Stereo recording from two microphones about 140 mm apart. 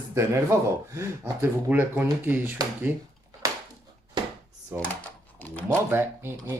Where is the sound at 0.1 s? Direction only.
20° right (ahead or behind).